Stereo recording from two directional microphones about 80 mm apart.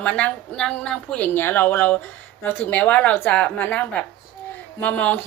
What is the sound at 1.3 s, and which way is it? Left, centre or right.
A woman's voice, left.